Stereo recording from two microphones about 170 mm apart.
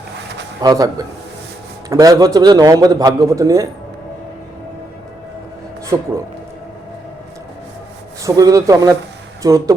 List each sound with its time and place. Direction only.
0.6 s a man's voice: 20° right (ahead or behind)
5.9 s a man's voice: 20° right (ahead or behind)
8.2 s a man's voice: 20° right (ahead or behind)